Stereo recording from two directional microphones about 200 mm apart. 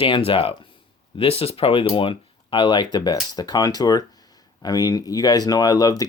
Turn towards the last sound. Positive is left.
turn(degrees=20)  # may be behind; listen again after turning